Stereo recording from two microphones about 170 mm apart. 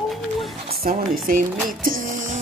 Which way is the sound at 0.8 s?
55° right (ahead or behind).